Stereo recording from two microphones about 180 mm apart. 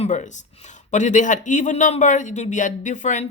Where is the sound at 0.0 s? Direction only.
40° left (ahead or behind).